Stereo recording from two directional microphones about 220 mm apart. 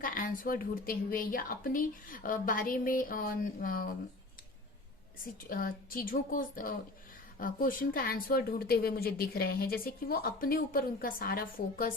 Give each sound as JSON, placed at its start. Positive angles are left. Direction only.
{"t": 0.0, "sound": "speech", "side_deg": 40}
{"t": 5.5, "sound": "speech", "side_deg": 40}